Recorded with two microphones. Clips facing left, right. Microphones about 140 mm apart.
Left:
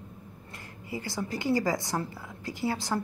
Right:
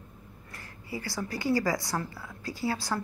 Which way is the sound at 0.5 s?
20° left (ahead or behind).